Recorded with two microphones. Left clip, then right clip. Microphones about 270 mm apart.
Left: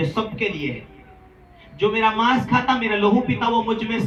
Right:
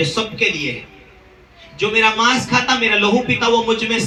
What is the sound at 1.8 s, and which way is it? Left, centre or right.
A man's voice, centre.